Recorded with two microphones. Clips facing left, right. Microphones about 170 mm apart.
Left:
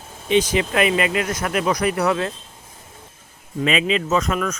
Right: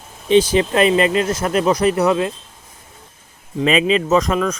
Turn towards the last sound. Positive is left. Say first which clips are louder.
# right 5 dB
turn(degrees=-30)  # may be behind; listen again after turning